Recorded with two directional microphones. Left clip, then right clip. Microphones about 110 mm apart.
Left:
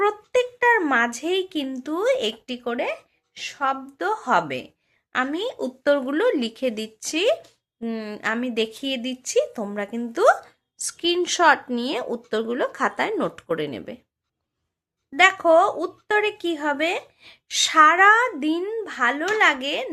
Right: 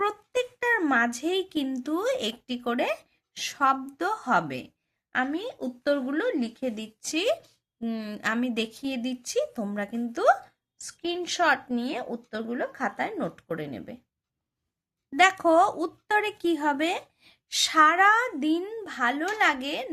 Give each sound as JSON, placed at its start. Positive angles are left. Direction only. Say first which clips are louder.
{"t": 0.0, "sound": "speech", "louder": "left 6 dB", "side_deg": -25}
{"t": 2.6, "sound": "speech", "louder": "left 1 dB", "side_deg": -55}
{"t": 3.9, "sound": "speech", "louder": "left 4 dB", "side_deg": -30}
{"t": 4.2, "sound": "a woman's voice", "louder": "left 5 dB", "side_deg": -15}
{"t": 7.0, "sound": "a woman's voice", "louder": "left 5 dB", "side_deg": -15}
{"t": 10.1, "sound": "speech", "louder": "left 5 dB", "side_deg": 0}
{"t": 10.8, "sound": "speech", "louder": "left 9 dB", "side_deg": 10}
{"t": 15.1, "sound": "speech", "louder": "left 4 dB", "side_deg": -30}